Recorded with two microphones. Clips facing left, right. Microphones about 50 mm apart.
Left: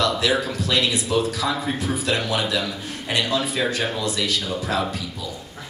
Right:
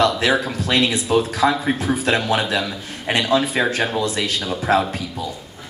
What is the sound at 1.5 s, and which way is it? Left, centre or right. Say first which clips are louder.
Speech: right 4 dB; right.